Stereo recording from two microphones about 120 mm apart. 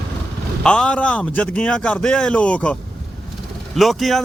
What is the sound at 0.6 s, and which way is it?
A man's voice, 10° left (ahead or behind).